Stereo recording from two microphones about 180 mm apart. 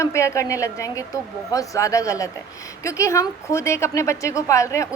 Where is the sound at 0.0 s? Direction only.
15° left (ahead or behind).